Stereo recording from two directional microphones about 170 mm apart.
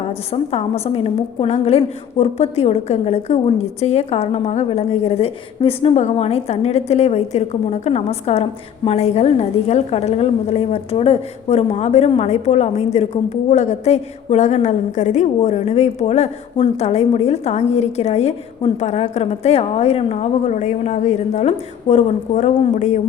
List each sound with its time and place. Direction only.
0.1 s a woman's voice: 35° left (ahead or behind)